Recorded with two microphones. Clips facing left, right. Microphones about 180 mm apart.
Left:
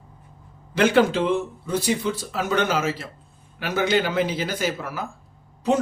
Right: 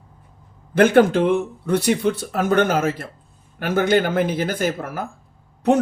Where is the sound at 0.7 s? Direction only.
50° right (ahead or behind).